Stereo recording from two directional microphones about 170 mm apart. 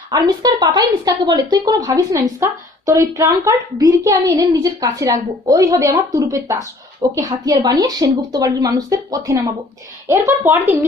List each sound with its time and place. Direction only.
0.1 s speech: 20° right (ahead or behind)